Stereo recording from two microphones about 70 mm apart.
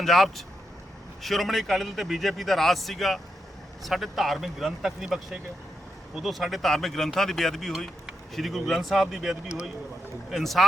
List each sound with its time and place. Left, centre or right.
0.0 s a man's voice: centre